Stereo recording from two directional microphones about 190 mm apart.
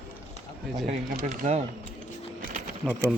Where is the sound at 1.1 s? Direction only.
40° right (ahead or behind).